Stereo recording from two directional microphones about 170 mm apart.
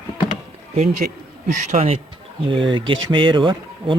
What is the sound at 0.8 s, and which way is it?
Speech, 45° right (ahead or behind).